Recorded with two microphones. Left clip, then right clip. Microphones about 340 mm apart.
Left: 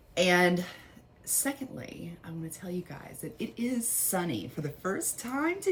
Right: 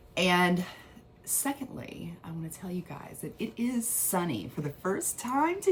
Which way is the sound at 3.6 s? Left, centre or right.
Right.